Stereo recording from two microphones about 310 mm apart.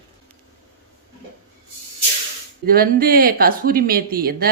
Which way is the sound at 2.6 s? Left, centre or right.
Right.